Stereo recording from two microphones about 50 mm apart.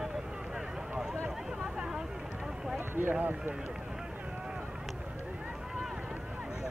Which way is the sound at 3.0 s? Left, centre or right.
Right.